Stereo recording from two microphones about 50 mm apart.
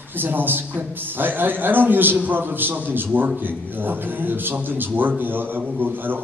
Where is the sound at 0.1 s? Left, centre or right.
Right.